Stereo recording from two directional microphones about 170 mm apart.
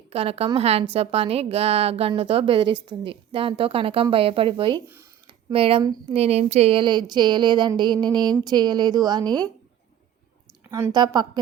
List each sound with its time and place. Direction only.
0.1 s a woman's voice: 35° right (ahead or behind)
5.8 s a woman's voice: 25° right (ahead or behind)
6.1 s a woman's voice: 40° right (ahead or behind)
10.7 s a woman's voice: 15° right (ahead or behind)
10.9 s a woman's voice: 25° right (ahead or behind)